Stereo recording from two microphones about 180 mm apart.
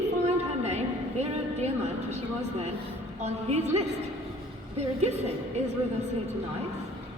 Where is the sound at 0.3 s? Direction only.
35° right (ahead or behind).